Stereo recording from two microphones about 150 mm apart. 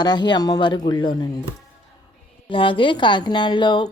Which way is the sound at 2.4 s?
35° left (ahead or behind).